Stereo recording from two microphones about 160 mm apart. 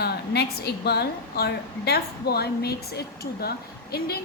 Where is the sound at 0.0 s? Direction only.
90° left.